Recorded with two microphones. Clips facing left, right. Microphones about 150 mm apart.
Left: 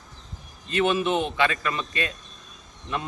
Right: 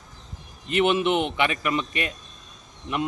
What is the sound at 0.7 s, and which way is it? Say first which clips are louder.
A man's voice: right 2 dB; 20° right (ahead or behind).